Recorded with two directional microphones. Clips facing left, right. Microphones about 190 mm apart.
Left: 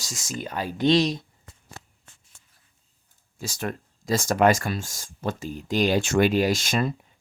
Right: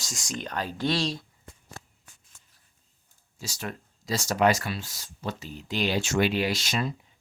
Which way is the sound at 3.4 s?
50° left (ahead or behind).